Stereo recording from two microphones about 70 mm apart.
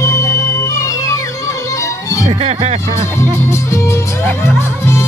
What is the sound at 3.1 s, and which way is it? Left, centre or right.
Speech, left.